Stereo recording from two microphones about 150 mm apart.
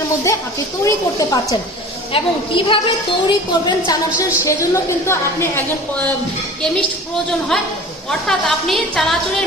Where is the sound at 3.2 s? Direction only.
30° left (ahead or behind).